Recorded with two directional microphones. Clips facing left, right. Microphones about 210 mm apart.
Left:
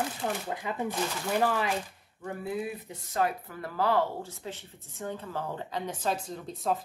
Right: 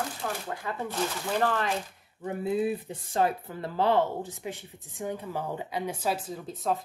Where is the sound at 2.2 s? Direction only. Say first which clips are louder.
Right 5 dB; 20° right (ahead or behind).